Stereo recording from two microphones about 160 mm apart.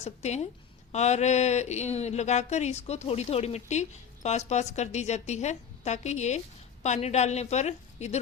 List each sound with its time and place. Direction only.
0.0 s speech: 45° left (ahead or behind)